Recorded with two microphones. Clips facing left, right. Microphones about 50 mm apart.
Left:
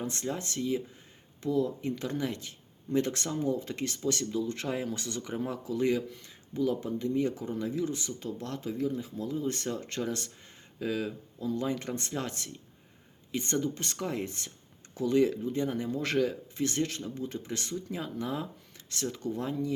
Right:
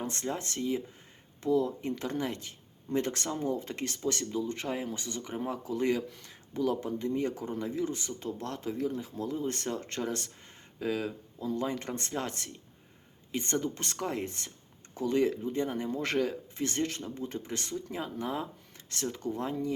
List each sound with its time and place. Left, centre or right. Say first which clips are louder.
0.0 s speech: even; right